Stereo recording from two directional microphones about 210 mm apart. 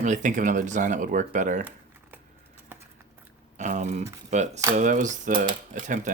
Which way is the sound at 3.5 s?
35° right (ahead or behind).